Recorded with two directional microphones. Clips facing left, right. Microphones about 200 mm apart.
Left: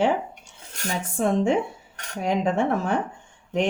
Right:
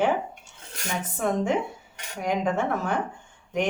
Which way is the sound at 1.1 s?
30° left (ahead or behind).